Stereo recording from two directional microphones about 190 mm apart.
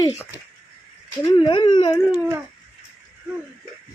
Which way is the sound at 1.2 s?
25° left (ahead or behind).